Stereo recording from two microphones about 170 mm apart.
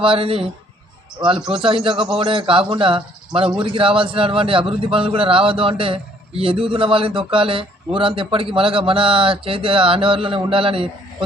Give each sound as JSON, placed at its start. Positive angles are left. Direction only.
{"t": 0.0, "sound": "a man's voice", "side_deg": -30}
{"t": 1.5, "sound": "a man's voice", "side_deg": -30}